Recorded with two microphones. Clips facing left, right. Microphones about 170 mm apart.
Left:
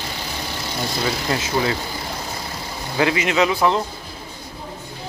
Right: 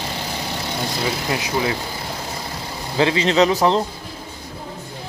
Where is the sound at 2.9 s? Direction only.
25° right (ahead or behind).